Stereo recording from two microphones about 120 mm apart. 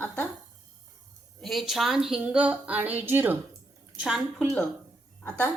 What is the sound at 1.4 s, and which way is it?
A woman's voice, centre (ahead or behind).